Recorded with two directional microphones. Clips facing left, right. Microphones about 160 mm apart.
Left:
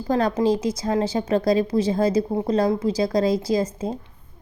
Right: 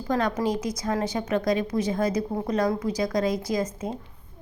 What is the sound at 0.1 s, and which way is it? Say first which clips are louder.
A woman's voice: left 5 dB; 30° left (ahead or behind).